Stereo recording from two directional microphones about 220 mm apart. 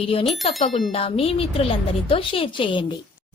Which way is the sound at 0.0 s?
25° left (ahead or behind).